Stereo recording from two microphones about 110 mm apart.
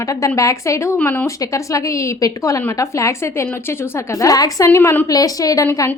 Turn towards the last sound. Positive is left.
turn(degrees=30)  # may be behind; listen again after turning